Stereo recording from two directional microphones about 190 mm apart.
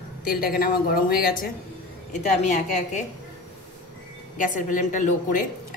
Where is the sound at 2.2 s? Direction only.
40° left (ahead or behind).